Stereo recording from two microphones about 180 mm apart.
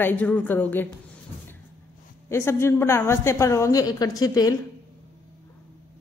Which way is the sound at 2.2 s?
15° left (ahead or behind).